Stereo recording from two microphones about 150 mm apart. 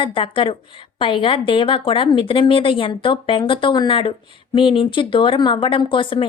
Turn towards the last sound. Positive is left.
turn(degrees=35)  # may be behind; listen again after turning